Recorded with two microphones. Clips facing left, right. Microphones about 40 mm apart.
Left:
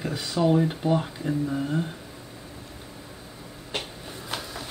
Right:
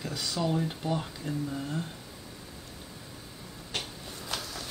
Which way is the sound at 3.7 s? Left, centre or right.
Centre.